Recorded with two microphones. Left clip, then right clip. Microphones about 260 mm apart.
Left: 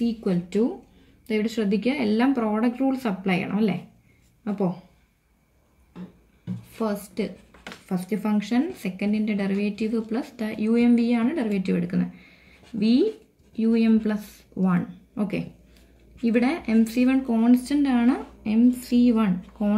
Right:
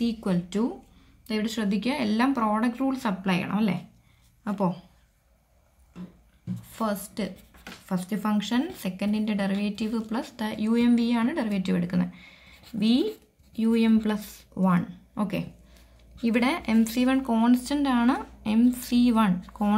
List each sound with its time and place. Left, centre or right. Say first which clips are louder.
0.0 s speech: left 2 dB; centre
7.9 s speech: left 2 dB; centre